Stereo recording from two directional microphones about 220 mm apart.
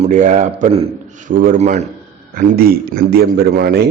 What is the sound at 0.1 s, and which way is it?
A man's voice, 35° right (ahead or behind).